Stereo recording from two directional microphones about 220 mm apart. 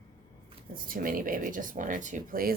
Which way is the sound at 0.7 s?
40° right (ahead or behind).